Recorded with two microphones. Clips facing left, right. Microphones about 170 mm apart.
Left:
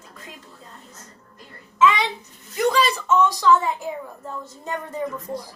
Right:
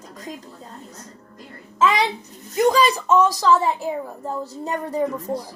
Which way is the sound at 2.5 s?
40° right (ahead or behind).